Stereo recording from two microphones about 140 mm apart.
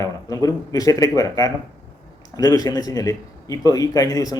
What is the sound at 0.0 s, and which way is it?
A man's voice, 25° left (ahead or behind).